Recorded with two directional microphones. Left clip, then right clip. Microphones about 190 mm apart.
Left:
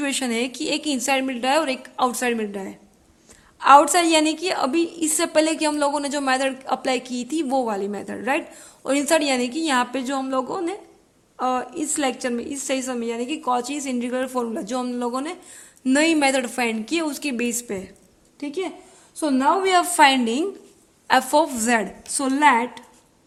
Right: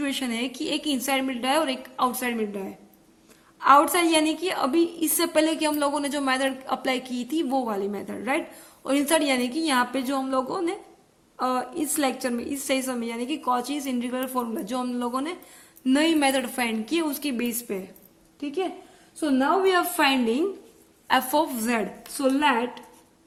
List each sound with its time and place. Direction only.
0.0 s a woman's voice: 40° left (ahead or behind)
19.2 s a woman's voice: 55° left (ahead or behind)
21.1 s a woman's voice: 40° left (ahead or behind); by 22.8 s 55° left (ahead or behind)